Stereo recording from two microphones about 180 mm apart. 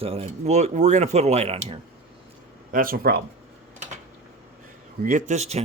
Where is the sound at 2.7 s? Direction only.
55° right (ahead or behind).